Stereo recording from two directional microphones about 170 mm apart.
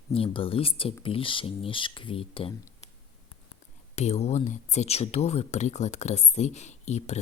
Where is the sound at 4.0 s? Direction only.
40° left (ahead or behind).